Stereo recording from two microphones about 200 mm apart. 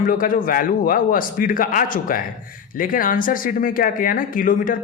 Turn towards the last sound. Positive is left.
turn(degrees=45)  # may be behind; listen again after turning